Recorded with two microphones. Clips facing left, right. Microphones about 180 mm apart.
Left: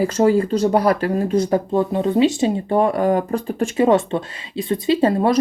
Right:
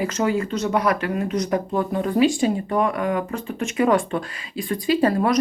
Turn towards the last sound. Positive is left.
turn(degrees=25)  # may be behind; listen again after turning